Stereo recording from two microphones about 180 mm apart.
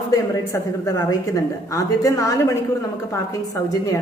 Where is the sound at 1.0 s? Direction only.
20° left (ahead or behind).